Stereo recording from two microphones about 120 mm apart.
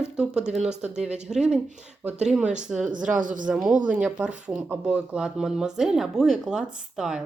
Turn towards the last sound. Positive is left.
turn(degrees=-5)  # may be behind; listen again after turning